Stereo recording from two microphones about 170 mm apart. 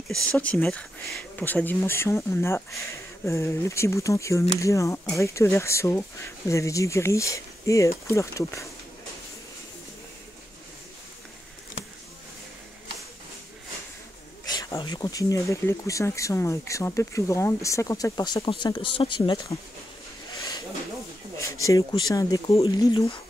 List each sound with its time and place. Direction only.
0.1 s speech: 5° left (ahead or behind)
14.5 s speech: 25° left (ahead or behind)
21.4 s speech: 20° left (ahead or behind)